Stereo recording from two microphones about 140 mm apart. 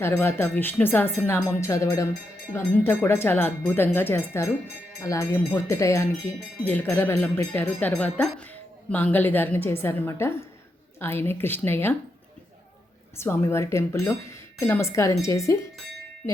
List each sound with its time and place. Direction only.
0.0 s speech: 15° left (ahead or behind)
13.1 s speech: 20° left (ahead or behind)